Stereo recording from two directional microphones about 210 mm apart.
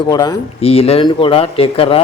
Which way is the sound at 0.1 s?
20° left (ahead or behind).